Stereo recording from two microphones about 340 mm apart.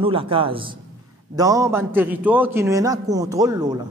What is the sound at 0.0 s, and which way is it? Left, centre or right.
A man's voice, centre.